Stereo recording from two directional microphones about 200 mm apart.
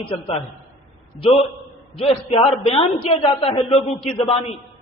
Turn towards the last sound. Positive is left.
turn(degrees=30)  # may be behind; listen again after turning